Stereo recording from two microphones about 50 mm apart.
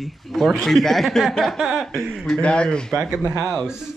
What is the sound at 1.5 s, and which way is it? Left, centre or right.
Chuckle, centre.